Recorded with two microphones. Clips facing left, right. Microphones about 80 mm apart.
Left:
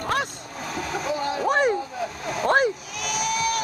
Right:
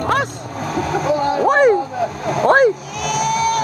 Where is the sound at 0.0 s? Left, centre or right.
Right.